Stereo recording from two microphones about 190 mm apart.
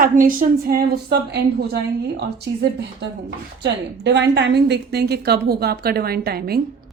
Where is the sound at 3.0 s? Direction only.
65° right (ahead or behind).